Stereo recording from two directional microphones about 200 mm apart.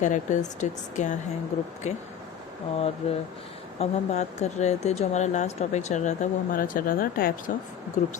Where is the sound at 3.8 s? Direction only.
35° left (ahead or behind).